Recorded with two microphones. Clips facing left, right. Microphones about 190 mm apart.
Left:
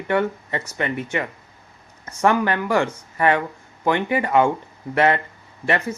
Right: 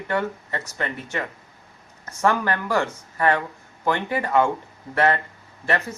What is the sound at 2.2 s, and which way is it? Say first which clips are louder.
Speech: left 3 dB; 15° left (ahead or behind).